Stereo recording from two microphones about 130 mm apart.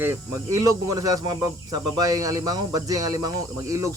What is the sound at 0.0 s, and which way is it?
Speech, 20° right (ahead or behind).